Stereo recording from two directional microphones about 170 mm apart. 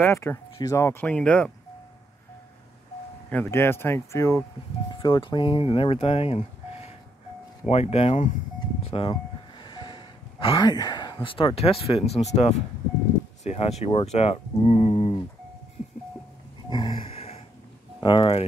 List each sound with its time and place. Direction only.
0.0 s speech: 15° left (ahead or behind)
3.3 s speech: 10° left (ahead or behind)
4.9 s speech: 30° left (ahead or behind)
8.8 s a sound: 30° left (ahead or behind)
11.2 s speech: 30° left (ahead or behind)
16.7 s gasp: 25° left (ahead or behind)
17.1 s a sound: 40° left (ahead or behind)
18.0 s speech: 30° left (ahead or behind)